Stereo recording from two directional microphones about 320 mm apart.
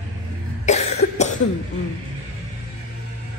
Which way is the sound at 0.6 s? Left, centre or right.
Left.